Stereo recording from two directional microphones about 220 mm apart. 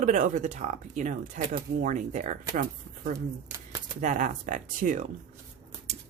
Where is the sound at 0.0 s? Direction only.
35° right (ahead or behind).